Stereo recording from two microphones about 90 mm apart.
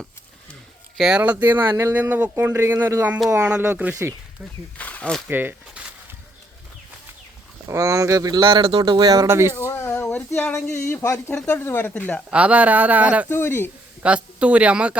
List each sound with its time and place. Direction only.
0.9 s speech: 5° right (ahead or behind)
1.2 s speech: 20° right (ahead or behind)
4.8 s snake: 15° left (ahead or behind)
5.3 s speech: 20° right (ahead or behind)
7.7 s speech: 35° right (ahead or behind)
8.4 s speech: 70° right (ahead or behind)
8.9 s speech: 45° right (ahead or behind)
9.2 s speech: 30° right (ahead or behind)
9.6 s a sound: 30° left (ahead or behind)
9.8 s a sound: 15° left (ahead or behind)
11.9 s speech: 15° left (ahead or behind)
12.3 s speech: 15° right (ahead or behind)
13.2 s a sound: 25° left (ahead or behind)
14.0 s speech: 15° right (ahead or behind)